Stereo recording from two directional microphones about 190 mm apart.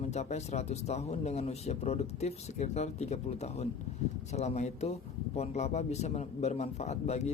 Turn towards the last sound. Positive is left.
turn(degrees=35)  # may be behind; listen again after turning